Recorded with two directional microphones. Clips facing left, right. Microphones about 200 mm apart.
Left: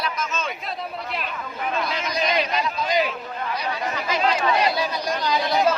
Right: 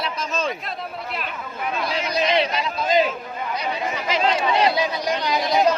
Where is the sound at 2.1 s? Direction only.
30° right (ahead or behind).